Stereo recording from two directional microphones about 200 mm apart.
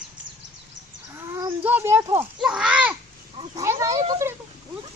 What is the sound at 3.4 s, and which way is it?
Speech, 15° right (ahead or behind).